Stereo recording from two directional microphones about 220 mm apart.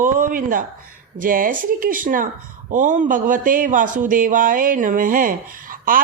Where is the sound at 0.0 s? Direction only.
35° right (ahead or behind).